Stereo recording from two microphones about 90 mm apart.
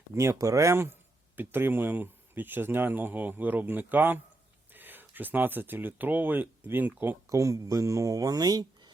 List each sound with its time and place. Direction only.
0.2 s speech: 35° right (ahead or behind)